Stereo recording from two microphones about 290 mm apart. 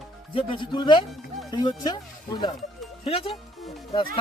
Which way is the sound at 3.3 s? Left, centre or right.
Centre.